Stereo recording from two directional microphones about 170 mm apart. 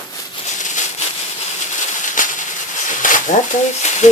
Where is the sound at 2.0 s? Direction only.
50° left (ahead or behind).